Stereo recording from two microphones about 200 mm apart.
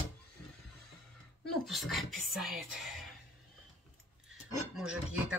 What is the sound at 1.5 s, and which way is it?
A woman's voice, centre (ahead or behind).